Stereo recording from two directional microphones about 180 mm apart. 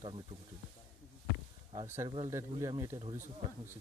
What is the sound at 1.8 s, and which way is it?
Speech, 15° right (ahead or behind).